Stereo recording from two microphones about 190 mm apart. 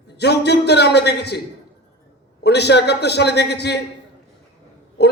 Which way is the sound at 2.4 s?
60° left (ahead or behind).